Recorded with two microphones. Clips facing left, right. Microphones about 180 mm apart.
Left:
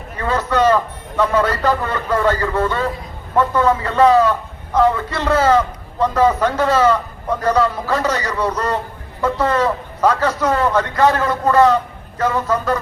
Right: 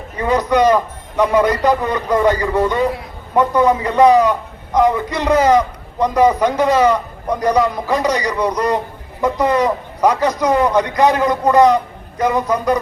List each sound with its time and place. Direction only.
0.2 s a man's voice: 15° right (ahead or behind)